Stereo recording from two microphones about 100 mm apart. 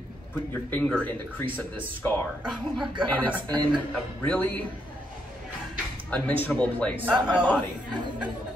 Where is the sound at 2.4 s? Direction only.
5° right (ahead or behind).